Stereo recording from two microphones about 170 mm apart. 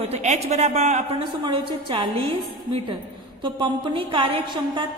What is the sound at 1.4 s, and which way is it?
A woman's voice, 30° right (ahead or behind).